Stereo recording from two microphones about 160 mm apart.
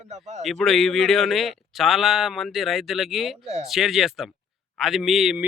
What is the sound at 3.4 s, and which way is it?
Speech, 40° right (ahead or behind).